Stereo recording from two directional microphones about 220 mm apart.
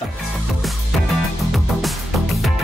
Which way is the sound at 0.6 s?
Centre (ahead or behind).